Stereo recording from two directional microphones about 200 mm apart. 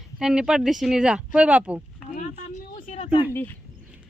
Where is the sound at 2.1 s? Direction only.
40° left (ahead or behind).